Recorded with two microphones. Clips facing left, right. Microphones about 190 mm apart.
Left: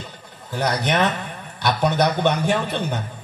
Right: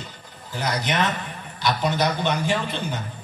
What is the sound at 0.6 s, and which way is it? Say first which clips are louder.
A man's voice: left 4 dB; 65° left (ahead or behind).